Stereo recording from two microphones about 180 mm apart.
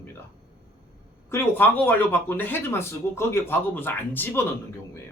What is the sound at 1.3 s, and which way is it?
Speech, 10° left (ahead or behind).